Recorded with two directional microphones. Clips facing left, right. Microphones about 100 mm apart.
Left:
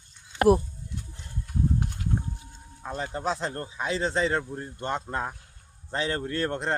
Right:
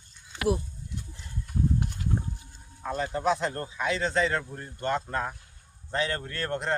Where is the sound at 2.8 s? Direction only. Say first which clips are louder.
Right 3 dB; 25° left (ahead or behind).